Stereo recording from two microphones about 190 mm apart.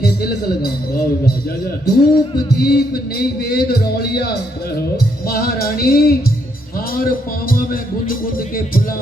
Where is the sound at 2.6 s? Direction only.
55° left (ahead or behind).